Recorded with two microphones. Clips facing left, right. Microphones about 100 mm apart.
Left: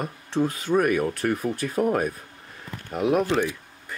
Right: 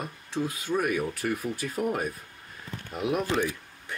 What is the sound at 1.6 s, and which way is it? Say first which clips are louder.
Speech: left 7 dB; 45° left (ahead or behind).